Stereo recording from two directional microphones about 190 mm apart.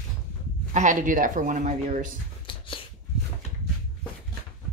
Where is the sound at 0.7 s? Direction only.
40° right (ahead or behind).